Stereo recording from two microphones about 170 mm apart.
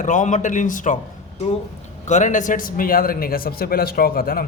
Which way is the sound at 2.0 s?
45° left (ahead or behind).